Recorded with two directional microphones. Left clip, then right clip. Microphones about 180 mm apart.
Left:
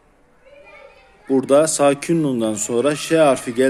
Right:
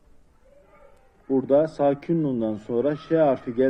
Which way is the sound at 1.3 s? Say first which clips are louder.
Left 6 dB; 30° left (ahead or behind).